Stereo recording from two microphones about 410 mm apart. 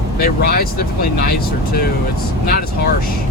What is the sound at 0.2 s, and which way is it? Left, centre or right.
Speech, left.